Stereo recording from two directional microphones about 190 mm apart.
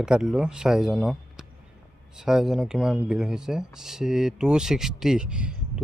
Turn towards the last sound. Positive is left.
turn(degrees=-5)  # may be behind; listen again after turning